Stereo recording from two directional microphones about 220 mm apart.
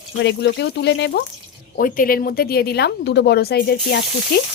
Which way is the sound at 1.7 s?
40° left (ahead or behind).